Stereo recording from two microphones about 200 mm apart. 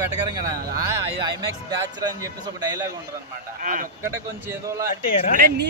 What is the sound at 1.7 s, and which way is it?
A man's voice, 20° right (ahead or behind).